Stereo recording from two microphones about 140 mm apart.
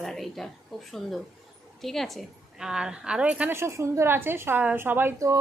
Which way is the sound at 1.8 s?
Centre (ahead or behind).